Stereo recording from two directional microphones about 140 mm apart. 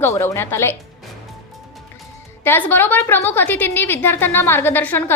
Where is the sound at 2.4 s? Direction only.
15° left (ahead or behind).